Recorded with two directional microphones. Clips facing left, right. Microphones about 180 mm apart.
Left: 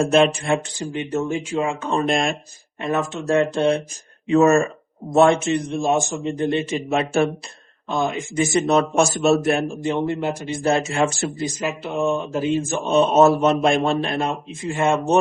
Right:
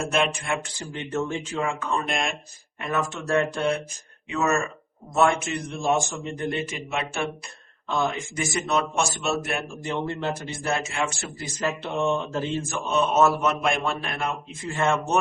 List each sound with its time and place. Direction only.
0.0 s speech: 30° left (ahead or behind)
0.8 s a man's voice: 20° left (ahead or behind)
2.0 s speech: 35° left (ahead or behind)
2.8 s a man's voice: 25° left (ahead or behind)
4.3 s a man's voice: 35° left (ahead or behind)
7.9 s a man's voice: 20° left (ahead or behind)
8.7 s speech: 40° left (ahead or behind)
9.8 s speech: 15° left (ahead or behind)
10.6 s a man's voice: 25° left (ahead or behind)
10.9 s speech: 40° left (ahead or behind)
11.3 s speech: 15° left (ahead or behind)
11.7 s speech: 5° left (ahead or behind)
12.8 s a man's voice: 30° left (ahead or behind)